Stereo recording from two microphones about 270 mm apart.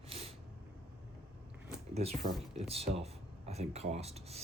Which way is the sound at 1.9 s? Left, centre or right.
Right.